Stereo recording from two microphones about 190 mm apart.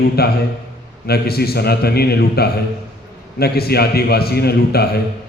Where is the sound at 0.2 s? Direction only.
55° left (ahead or behind).